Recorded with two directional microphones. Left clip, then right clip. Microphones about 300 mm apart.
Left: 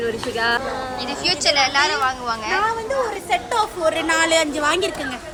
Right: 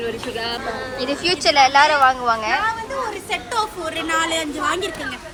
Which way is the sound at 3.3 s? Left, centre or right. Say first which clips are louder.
Left 2 dB; left.